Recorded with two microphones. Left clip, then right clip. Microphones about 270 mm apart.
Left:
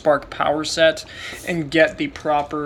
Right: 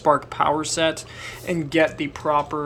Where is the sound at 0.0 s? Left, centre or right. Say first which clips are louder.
Left 1 dB; centre.